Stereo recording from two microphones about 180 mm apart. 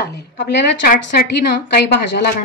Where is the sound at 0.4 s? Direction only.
75° left (ahead or behind).